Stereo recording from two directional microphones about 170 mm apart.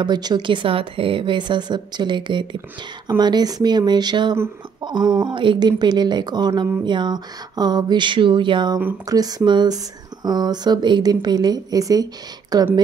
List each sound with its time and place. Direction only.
0.0 s a woman's voice: 25° right (ahead or behind)